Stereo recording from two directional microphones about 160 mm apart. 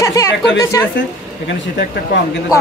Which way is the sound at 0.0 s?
20° left (ahead or behind).